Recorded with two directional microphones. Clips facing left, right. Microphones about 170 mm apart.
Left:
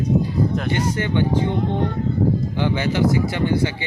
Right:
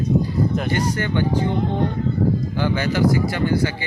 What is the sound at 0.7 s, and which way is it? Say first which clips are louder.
Speech: even; 20° left (ahead or behind).